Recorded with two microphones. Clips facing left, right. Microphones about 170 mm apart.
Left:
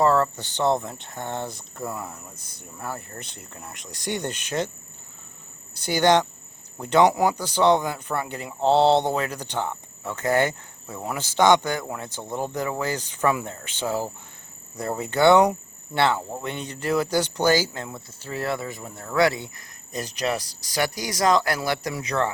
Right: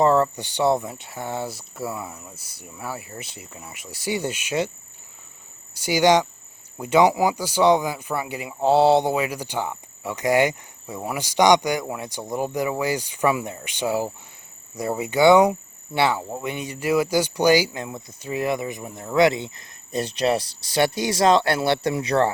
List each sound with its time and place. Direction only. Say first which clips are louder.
0.0 s speech: right 2 dB; 15° right (ahead or behind)
5.7 s speech: right 2 dB; 10° right (ahead or behind); by 22.3 s 30° right (ahead or behind)